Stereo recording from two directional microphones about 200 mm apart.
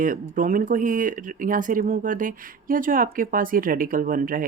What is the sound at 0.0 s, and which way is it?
Speech, 40° right (ahead or behind).